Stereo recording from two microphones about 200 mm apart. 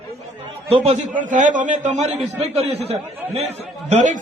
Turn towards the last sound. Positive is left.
turn(degrees=-35)  # may be behind; listen again after turning